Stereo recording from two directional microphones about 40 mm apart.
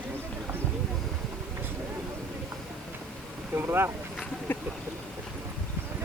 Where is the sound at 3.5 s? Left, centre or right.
Right.